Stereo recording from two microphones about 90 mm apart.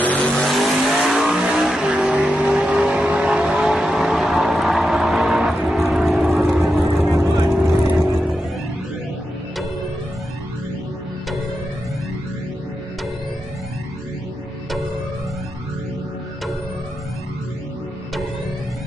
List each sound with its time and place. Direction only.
0.0 s vehicle: 20° left (ahead or behind)
0.3 s vehicle: centre (ahead or behind)